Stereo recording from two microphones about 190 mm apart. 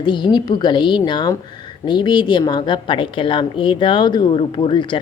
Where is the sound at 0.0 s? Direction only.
25° left (ahead or behind).